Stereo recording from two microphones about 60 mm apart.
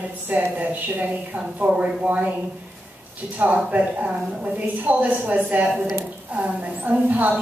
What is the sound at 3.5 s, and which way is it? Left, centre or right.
A woman's voice, right.